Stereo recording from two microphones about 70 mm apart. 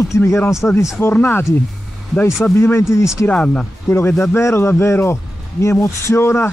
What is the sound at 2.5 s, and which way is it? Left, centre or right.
Speech, left.